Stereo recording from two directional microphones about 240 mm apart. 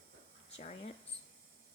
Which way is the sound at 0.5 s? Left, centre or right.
Left.